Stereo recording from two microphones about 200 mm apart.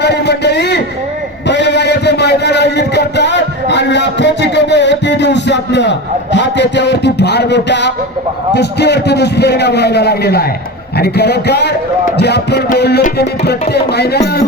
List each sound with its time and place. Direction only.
0.0 s a man's voice: 55° left (ahead or behind)